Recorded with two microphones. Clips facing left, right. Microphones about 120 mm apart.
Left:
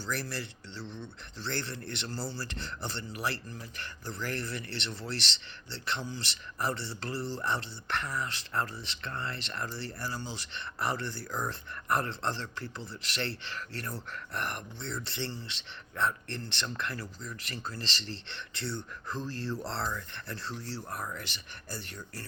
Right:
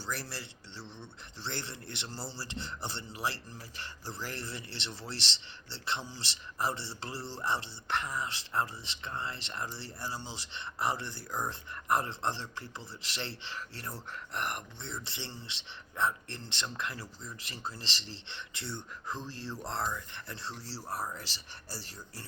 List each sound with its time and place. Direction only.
0.3 s speech: 25° right (ahead or behind)